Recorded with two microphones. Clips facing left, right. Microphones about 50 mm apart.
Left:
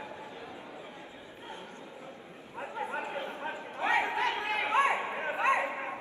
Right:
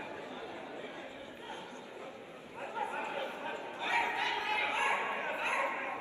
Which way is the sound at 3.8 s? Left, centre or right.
Left.